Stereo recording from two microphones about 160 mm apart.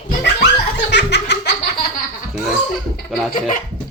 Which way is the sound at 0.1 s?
60° left (ahead or behind).